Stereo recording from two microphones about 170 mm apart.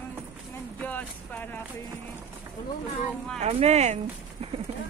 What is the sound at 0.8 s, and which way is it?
Speech, 10° left (ahead or behind).